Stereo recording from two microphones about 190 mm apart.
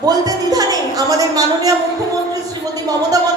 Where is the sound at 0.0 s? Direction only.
20° right (ahead or behind).